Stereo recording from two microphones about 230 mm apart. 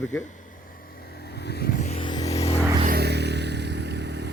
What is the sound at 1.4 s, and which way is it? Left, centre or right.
Vehicle, left.